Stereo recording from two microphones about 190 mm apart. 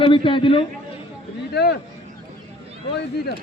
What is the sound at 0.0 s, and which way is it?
Speech, 25° left (ahead or behind).